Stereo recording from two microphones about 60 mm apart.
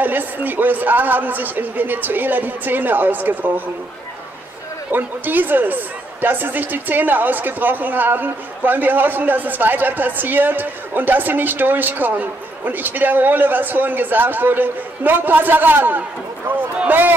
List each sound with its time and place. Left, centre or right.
0.0 s speech: right
4.9 s speech: right